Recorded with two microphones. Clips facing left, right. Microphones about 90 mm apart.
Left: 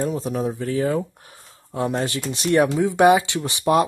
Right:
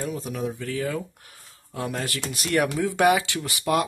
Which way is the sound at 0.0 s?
35° left (ahead or behind).